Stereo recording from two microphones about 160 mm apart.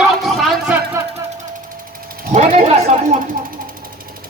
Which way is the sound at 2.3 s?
45° right (ahead or behind).